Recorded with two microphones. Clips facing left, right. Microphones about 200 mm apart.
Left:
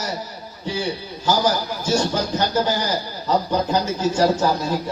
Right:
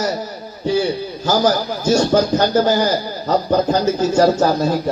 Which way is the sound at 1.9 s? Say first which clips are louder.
Right 7 dB; 45° right (ahead or behind).